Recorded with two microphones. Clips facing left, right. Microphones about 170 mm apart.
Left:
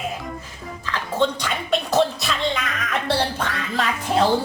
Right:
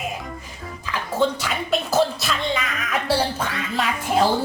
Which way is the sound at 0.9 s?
5° right (ahead or behind).